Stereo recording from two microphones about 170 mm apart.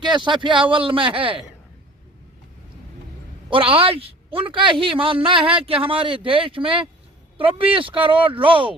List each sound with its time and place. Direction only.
0.0 s speech: 25° right (ahead or behind)
3.5 s a man's voice: 35° right (ahead or behind)